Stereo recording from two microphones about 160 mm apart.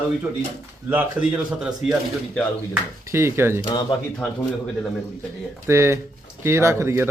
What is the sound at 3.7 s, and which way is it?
Speech, 30° left (ahead or behind).